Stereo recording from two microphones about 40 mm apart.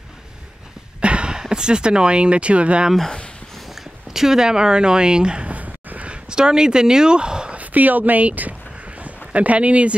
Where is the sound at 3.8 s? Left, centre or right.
Centre.